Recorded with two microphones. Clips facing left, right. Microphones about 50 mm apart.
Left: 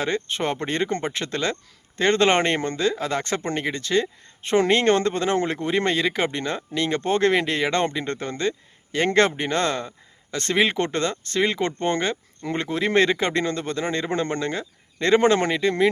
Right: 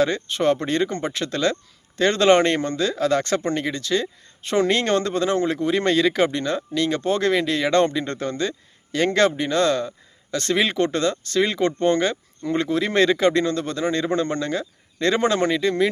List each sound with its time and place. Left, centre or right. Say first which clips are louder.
0.0 s speech: right 5 dB; left